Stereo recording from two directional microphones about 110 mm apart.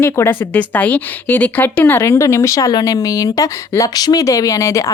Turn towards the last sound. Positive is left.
turn(degrees=30)  # may be behind; listen again after turning